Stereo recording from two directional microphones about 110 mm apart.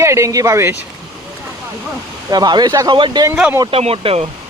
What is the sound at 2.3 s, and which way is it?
Speech, 40° right (ahead or behind).